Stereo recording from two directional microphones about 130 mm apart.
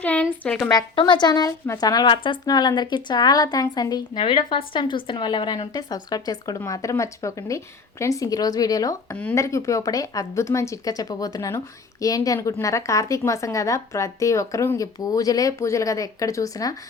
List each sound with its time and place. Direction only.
0.0 s a woman's voice: 10° left (ahead or behind)
0.7 s a woman's voice: 35° left (ahead or behind)